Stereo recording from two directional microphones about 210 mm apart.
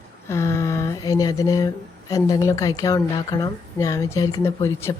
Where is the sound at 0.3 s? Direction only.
15° left (ahead or behind).